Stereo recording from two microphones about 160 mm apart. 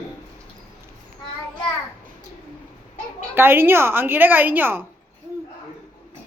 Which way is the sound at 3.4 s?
15° right (ahead or behind).